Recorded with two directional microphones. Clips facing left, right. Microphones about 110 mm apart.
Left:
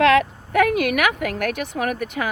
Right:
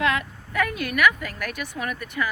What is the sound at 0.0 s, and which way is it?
A woman's voice, 90° left.